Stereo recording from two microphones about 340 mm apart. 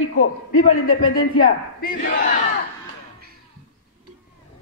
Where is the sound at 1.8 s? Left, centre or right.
Left.